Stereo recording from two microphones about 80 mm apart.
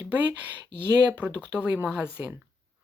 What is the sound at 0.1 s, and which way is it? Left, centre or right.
Speech, right.